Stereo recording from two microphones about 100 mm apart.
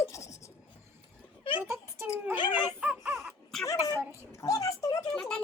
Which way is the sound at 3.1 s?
Centre (ahead or behind).